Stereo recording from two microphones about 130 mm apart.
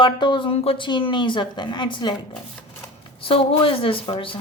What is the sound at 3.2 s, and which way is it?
A woman's voice, 45° left (ahead or behind).